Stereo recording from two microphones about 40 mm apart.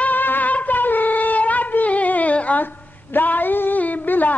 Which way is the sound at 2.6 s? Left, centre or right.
Left.